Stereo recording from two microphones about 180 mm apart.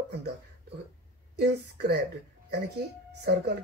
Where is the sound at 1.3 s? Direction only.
65° right (ahead or behind).